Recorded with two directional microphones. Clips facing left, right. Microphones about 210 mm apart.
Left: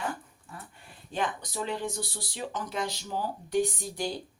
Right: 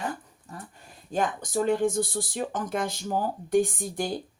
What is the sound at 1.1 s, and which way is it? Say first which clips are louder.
Speech: right 6 dB; 45° right (ahead or behind).